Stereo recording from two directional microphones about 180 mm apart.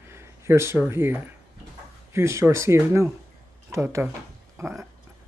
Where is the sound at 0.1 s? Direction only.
15° right (ahead or behind).